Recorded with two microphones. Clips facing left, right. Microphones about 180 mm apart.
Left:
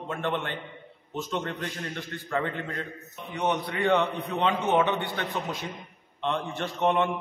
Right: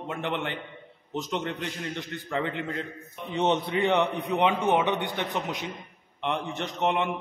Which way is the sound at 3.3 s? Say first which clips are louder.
Right 3 dB; 25° right (ahead or behind).